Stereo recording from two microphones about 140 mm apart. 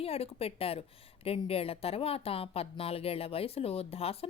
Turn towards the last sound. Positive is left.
turn(degrees=45)  # may be behind; listen again after turning